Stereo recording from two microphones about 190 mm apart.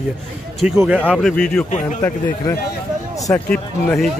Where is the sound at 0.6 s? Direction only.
5° right (ahead or behind).